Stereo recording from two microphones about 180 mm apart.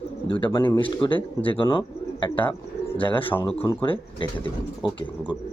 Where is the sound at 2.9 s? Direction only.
30° left (ahead or behind).